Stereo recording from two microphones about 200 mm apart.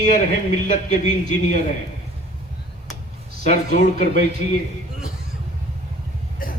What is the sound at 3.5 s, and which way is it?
Speech, 40° left (ahead or behind).